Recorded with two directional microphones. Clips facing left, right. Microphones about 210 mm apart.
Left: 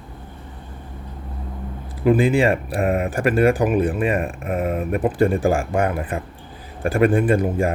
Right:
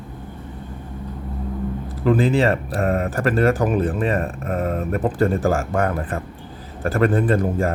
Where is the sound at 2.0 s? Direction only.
10° left (ahead or behind).